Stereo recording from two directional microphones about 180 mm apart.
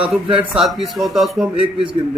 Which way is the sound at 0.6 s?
Centre (ahead or behind).